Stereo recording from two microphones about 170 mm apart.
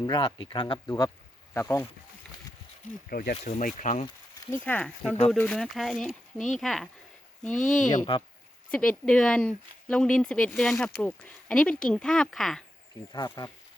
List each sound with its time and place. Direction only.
0.0 s speech: 25° left (ahead or behind)
3.1 s speech: 60° left (ahead or behind)
4.5 s speech: 10° left (ahead or behind)
7.5 s speech: 50° left (ahead or behind)
8.7 s speech: 5° left (ahead or behind)
13.1 s speech: 25° left (ahead or behind)